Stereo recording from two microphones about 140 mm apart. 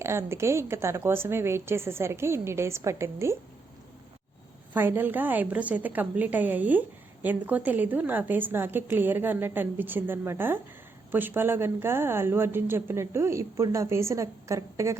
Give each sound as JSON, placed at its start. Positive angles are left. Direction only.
{"t": 0.0, "sound": "a woman's voice", "side_deg": -20}
{"t": 4.7, "sound": "a woman's voice", "side_deg": -15}